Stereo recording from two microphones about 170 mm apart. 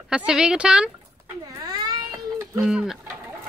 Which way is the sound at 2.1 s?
15° right (ahead or behind).